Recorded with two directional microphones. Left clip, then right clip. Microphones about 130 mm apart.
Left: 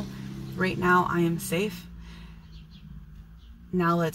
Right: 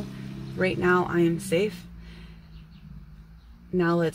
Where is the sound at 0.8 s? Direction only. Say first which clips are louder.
Left 1 dB; 45° right (ahead or behind).